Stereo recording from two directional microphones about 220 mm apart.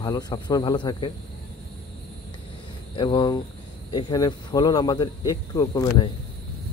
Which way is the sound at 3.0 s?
20° left (ahead or behind).